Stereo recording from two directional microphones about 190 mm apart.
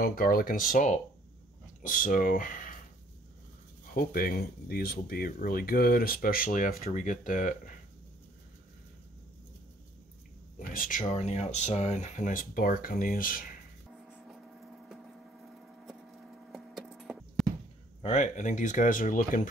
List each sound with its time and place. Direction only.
0.0 s speech: 50° left (ahead or behind)
3.9 s speech: 50° left (ahead or behind)
10.7 s speech: 45° left (ahead or behind)
13.9 s writing: centre (ahead or behind)
15.6 s a sound: centre (ahead or behind)
18.0 s speech: 40° left (ahead or behind)